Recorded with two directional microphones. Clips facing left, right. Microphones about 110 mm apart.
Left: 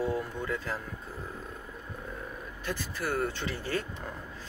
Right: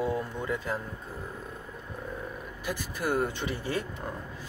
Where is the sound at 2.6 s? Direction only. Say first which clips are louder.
Right 2 dB; 15° right (ahead or behind).